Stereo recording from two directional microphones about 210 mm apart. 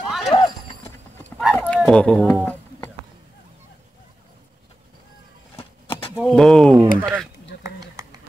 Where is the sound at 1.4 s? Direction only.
5° left (ahead or behind).